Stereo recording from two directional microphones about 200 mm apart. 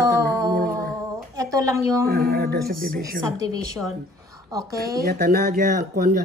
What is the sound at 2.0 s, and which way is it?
Speech, 50° right (ahead or behind).